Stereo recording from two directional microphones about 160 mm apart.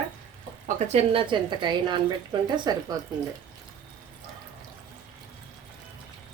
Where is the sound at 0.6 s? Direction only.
40° right (ahead or behind).